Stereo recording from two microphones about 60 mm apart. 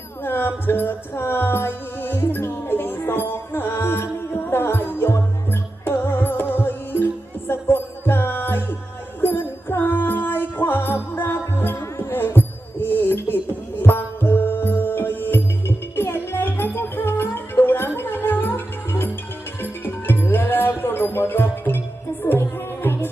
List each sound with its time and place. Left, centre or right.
0.3 s music: left